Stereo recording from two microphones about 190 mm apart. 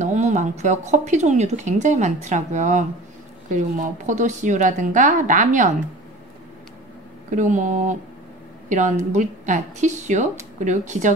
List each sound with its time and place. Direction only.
0.0 s speech: 40° right (ahead or behind)
7.2 s a woman's voice: 40° right (ahead or behind)